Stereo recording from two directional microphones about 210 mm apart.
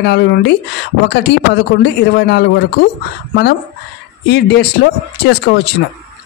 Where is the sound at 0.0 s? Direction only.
50° left (ahead or behind).